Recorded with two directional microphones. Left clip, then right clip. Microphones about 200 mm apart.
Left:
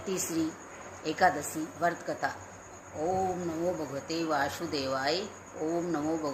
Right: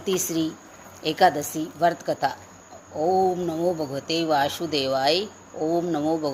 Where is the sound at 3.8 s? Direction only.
40° right (ahead or behind).